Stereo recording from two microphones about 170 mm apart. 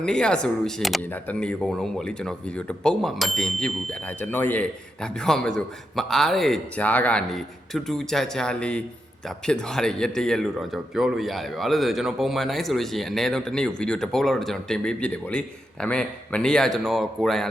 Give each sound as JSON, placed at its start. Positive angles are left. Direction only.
{"t": 0.0, "sound": "speech", "side_deg": 5}